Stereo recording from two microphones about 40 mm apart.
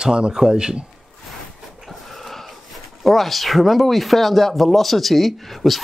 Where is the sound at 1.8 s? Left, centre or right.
Centre.